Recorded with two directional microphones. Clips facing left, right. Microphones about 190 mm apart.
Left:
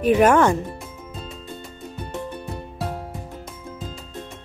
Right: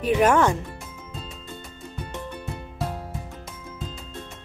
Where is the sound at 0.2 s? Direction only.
55° left (ahead or behind).